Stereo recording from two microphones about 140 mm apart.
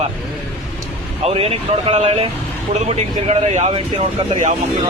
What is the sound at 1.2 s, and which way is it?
Speech, 45° right (ahead or behind).